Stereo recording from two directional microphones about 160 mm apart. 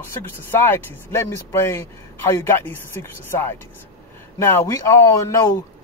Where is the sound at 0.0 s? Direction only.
15° left (ahead or behind).